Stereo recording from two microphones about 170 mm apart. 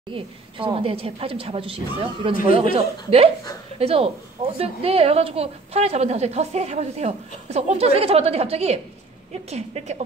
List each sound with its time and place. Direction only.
0.1 s a woman's voice: 30° right (ahead or behind)